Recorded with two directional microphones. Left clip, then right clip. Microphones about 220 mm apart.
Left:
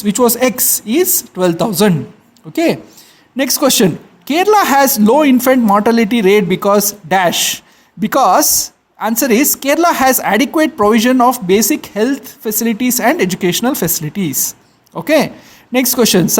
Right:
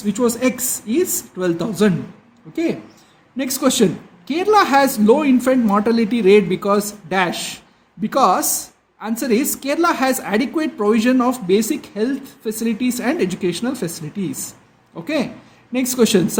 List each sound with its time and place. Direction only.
0.0 s a woman's voice: 45° left (ahead or behind)